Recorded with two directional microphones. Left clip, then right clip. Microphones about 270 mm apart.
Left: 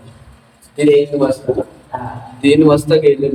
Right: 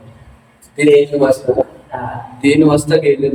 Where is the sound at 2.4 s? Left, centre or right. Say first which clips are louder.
Left 1 dB; centre.